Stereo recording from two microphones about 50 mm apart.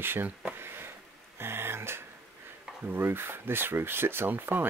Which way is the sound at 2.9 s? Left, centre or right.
Right.